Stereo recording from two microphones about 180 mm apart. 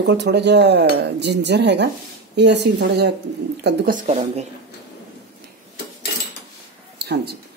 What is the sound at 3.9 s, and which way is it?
Speech, 40° right (ahead or behind).